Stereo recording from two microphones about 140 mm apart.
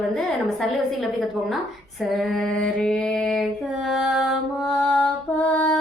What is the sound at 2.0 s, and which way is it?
Music, centre (ahead or behind).